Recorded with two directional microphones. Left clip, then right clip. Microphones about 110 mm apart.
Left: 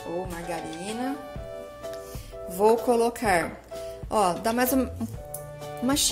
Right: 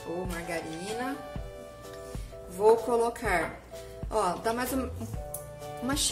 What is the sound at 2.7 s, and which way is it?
Speech, 90° left.